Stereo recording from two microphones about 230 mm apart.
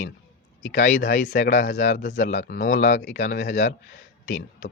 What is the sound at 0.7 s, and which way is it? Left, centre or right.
Speech, left.